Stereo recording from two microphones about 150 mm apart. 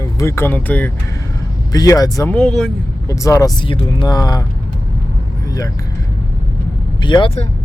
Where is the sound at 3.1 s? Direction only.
20° left (ahead or behind).